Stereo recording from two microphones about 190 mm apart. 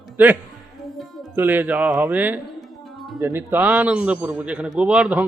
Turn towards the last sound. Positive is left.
turn(degrees=-5)  # may be behind; listen again after turning